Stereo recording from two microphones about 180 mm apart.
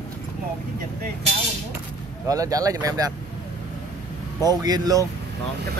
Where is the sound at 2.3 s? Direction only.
20° right (ahead or behind).